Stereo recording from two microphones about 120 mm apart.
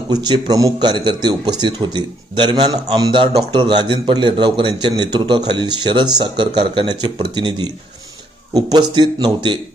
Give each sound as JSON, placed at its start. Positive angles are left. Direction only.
{"t": 0.1, "sound": "a man's voice", "side_deg": -35}